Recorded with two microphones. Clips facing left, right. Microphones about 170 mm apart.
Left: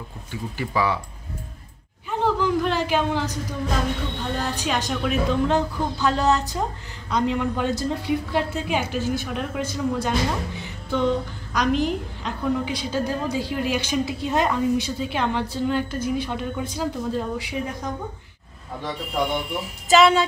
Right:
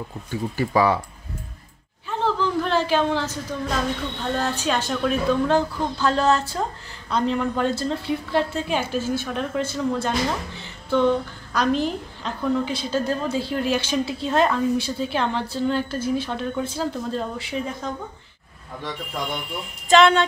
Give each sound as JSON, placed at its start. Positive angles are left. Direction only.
{"t": 0.3, "sound": "speech", "side_deg": -45}
{"t": 2.0, "sound": "a sound", "side_deg": 10}
{"t": 4.4, "sound": "a woman's voice", "side_deg": 10}
{"t": 19.9, "sound": "speech", "side_deg": 5}